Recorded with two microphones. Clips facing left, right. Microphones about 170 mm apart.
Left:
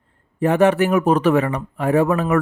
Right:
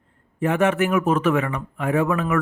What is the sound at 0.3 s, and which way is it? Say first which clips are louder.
Speech: left 4 dB; 35° left (ahead or behind).